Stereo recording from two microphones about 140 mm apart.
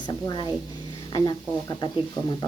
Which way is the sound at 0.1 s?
30° left (ahead or behind).